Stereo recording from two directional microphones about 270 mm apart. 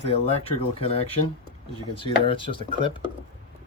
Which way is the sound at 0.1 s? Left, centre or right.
Left.